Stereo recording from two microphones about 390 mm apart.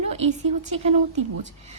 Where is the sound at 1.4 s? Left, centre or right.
Centre.